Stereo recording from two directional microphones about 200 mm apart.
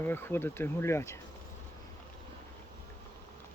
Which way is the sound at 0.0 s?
10° left (ahead or behind).